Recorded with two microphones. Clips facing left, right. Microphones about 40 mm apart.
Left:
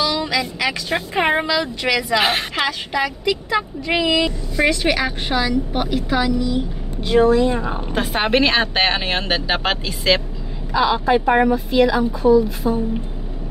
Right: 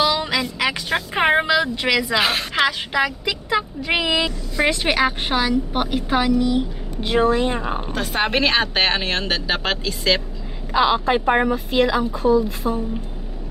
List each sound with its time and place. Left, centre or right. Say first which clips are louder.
0.0 s vehicle: right 1 dB; right
1.1 s speech: right 1 dB; centre
2.2 s a woman's voice: left 2 dB; left
2.7 s a woman's voice: right 1 dB; centre
6.4 s vehicle: right 1 dB; right
7.2 s a woman's voice: left 3 dB; right
8.1 s a woman's voice: left 2 dB; centre
10.7 s a woman's voice: left 1 dB; right
11.2 s speech: left 2 dB; centre
11.5 s a woman's voice: left 3 dB; right